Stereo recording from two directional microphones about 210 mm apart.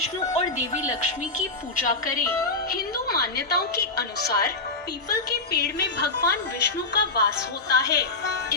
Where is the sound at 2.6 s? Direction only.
45° left (ahead or behind).